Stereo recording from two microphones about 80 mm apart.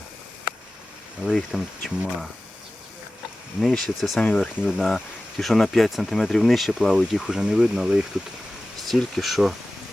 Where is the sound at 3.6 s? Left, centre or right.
Centre.